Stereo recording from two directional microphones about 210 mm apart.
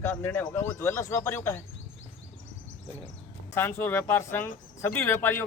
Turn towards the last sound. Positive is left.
turn(degrees=10)  # may be behind; listen again after turning